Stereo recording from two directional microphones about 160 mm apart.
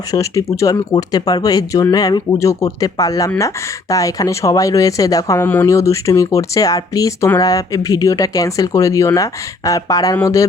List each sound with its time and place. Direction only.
0.1 s speech: 20° left (ahead or behind)